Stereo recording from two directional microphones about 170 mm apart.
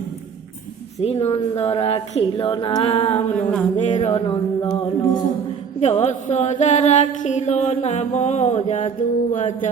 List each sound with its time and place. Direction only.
0.9 s speech: 35° left (ahead or behind)
3.3 s a sound: 5° left (ahead or behind)
3.8 s speech: 45° left (ahead or behind)
5.8 s mantra: 40° left (ahead or behind)